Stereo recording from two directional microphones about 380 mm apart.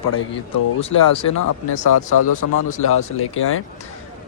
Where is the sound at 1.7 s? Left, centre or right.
Left.